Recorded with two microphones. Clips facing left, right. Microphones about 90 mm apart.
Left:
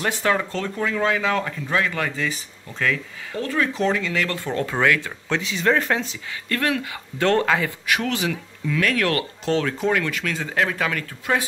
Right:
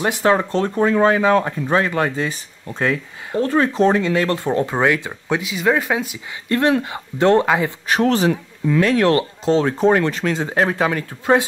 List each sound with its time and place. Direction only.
0.0 s speech: 20° right (ahead or behind)
6.5 s speech: 25° right (ahead or behind)
7.8 s speech: 35° right (ahead or behind)